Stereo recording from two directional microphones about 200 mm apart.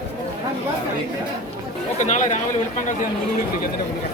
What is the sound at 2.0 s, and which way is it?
Speech, 35° left (ahead or behind).